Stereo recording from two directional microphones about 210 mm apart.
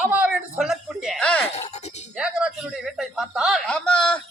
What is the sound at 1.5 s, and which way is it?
Speech, 30° left (ahead or behind).